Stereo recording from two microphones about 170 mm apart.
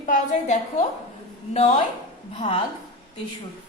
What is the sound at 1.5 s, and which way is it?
A woman's voice, 40° left (ahead or behind).